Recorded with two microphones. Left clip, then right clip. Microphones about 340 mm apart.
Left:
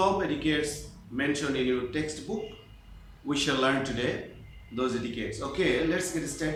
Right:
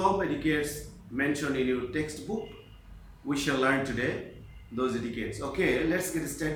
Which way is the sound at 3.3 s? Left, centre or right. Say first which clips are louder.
Left 1 dB; centre.